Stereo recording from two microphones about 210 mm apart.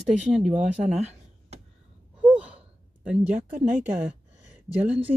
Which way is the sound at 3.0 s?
5° right (ahead or behind).